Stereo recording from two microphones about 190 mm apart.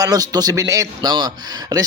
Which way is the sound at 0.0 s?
20° right (ahead or behind).